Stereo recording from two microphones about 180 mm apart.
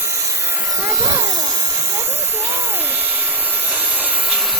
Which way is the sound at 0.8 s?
15° right (ahead or behind).